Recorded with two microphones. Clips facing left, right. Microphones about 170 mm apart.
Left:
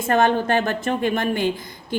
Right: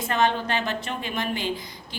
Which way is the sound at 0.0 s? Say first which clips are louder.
Left 5 dB; 50° left (ahead or behind).